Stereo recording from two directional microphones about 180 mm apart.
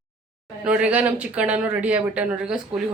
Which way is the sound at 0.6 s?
5° right (ahead or behind).